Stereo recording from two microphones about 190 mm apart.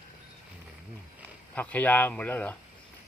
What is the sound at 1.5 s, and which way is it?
Speech, 10° left (ahead or behind).